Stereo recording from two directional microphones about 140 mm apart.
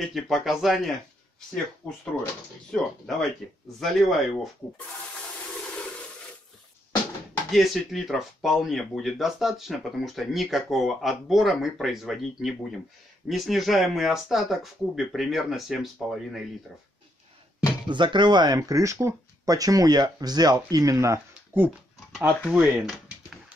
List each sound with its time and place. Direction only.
0.0 s speech: centre (ahead or behind)
1.8 s speech: 5° left (ahead or behind)
7.5 s speech: centre (ahead or behind)
17.8 s speech: 35° right (ahead or behind); by 21.7 s 15° right (ahead or behind)
22.4 s speech: centre (ahead or behind)